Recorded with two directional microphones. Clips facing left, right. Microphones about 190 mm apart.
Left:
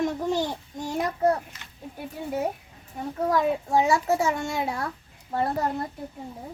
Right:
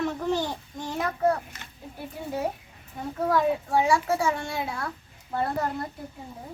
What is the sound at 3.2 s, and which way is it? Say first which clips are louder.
A child's voice: even; 20° left (ahead or behind).